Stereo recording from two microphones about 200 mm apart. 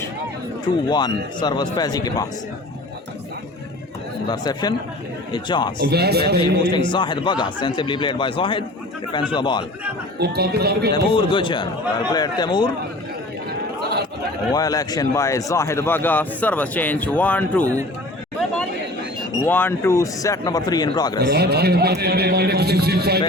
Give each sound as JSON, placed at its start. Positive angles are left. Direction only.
{"t": 0.9, "sound": "speech", "side_deg": 20}
{"t": 4.3, "sound": "speech", "side_deg": 20}
{"t": 5.9, "sound": "a man's voice", "side_deg": -55}
{"t": 6.7, "sound": "speech", "side_deg": 25}
{"t": 10.2, "sound": "a man's voice", "side_deg": -50}
{"t": 10.9, "sound": "speech", "side_deg": 25}
{"t": 14.5, "sound": "a man's voice", "side_deg": 15}
{"t": 19.4, "sound": "a man's voice", "side_deg": 10}
{"t": 21.2, "sound": "a man's voice", "side_deg": -50}